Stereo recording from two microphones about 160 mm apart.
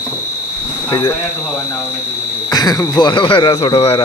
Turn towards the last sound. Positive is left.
turn(degrees=35)  # may be behind; listen again after turning